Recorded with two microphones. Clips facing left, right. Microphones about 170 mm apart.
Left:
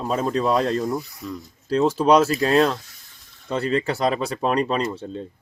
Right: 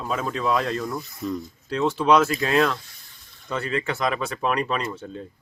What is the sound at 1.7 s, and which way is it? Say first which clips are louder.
Speech: left 3 dB; 40° left (ahead or behind).